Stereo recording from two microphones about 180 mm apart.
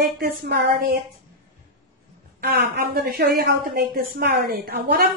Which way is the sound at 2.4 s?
60° right (ahead or behind).